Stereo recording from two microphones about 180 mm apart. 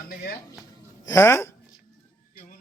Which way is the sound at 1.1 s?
15° left (ahead or behind).